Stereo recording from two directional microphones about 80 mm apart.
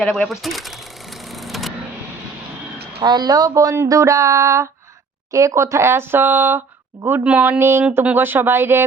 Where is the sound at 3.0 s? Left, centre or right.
Right; by 7.6 s centre.